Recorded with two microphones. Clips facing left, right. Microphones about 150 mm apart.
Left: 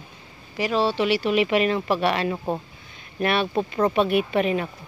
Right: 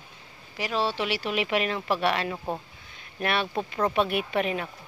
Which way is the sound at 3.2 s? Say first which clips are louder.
Left 5 dB; 10° left (ahead or behind).